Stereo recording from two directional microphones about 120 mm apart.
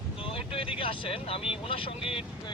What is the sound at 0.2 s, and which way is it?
Vehicle, 45° left (ahead or behind).